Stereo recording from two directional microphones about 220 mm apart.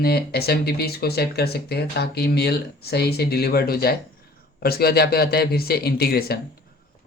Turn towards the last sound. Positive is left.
turn(degrees=45)  # may be behind; listen again after turning